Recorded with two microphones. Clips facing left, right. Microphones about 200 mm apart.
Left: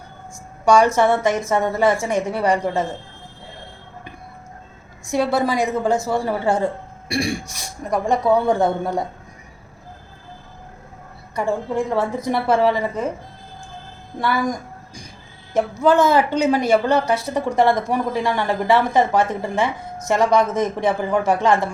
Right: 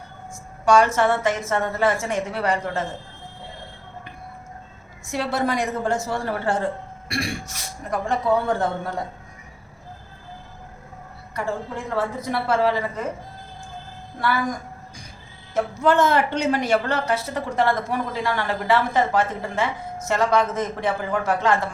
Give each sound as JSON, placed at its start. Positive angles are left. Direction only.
{"t": 0.7, "sound": "a woman's voice", "side_deg": 10}
{"t": 5.2, "sound": "a woman's voice", "side_deg": 10}
{"t": 11.3, "sound": "a woman's voice", "side_deg": 15}
{"t": 14.2, "sound": "a woman's voice", "side_deg": 15}
{"t": 15.5, "sound": "a woman's voice", "side_deg": 10}